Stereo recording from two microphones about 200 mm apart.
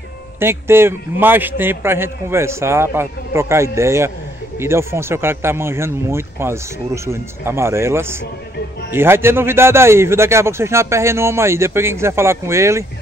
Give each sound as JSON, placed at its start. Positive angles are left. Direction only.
{"t": 0.4, "sound": "a man's voice", "side_deg": -10}